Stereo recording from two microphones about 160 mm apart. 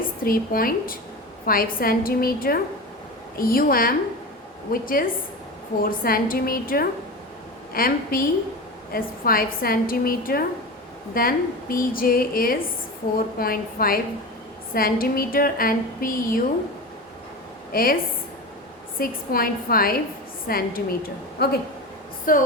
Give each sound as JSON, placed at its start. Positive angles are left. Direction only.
{"t": 0.3, "sound": "a woman's voice", "side_deg": 65}
{"t": 17.7, "sound": "a woman's voice", "side_deg": 65}
{"t": 22.3, "sound": "a woman's voice", "side_deg": 60}